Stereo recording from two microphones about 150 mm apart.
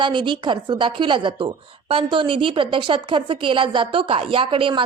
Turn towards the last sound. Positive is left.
turn(degrees=-35)  # may be behind; listen again after turning